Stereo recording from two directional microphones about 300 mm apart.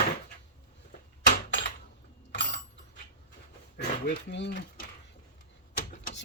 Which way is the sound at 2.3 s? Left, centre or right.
Left.